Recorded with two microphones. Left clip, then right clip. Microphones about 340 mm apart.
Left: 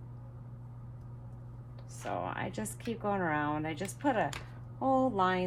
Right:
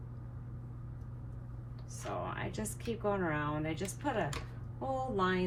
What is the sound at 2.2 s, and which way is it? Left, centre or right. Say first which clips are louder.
Speech: left 3 dB; left.